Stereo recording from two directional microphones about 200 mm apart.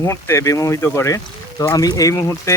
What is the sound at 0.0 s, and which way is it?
Speech, 15° left (ahead or behind).